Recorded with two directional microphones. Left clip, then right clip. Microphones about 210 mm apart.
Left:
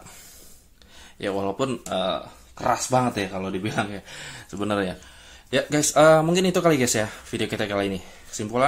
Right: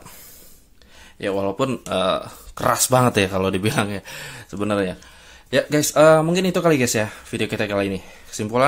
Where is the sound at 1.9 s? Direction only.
35° right (ahead or behind).